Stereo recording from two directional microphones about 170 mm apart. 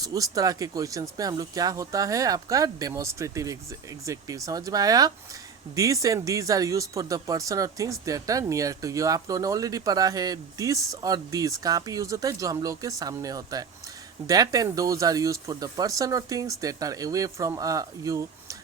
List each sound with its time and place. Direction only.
0.0 s speech: 20° right (ahead or behind)